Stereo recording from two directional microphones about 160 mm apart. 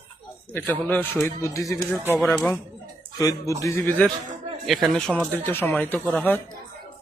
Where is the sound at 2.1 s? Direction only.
Centre (ahead or behind).